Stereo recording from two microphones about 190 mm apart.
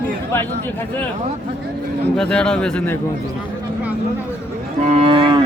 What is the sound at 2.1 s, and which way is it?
Speech, 5° left (ahead or behind).